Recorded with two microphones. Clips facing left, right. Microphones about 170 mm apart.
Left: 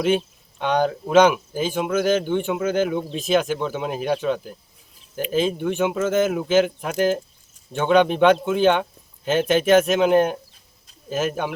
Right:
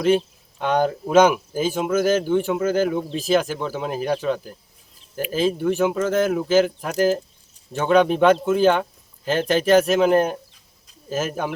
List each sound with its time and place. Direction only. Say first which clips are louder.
0.6 s speech: even; 5° right (ahead or behind)